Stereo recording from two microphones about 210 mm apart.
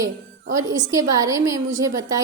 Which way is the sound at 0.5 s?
15° right (ahead or behind).